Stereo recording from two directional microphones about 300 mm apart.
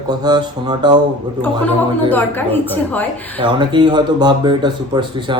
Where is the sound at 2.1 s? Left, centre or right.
Centre.